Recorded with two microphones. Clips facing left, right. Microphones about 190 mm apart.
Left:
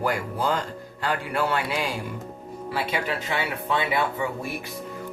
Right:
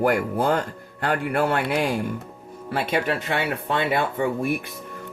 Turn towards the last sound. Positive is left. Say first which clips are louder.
# right 5 dB
turn(degrees=-55)  # may be behind; listen again after turning